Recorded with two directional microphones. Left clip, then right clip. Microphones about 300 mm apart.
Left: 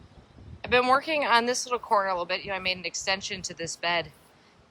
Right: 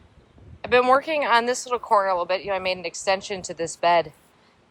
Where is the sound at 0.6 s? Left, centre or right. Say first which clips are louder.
Right 4 dB; centre.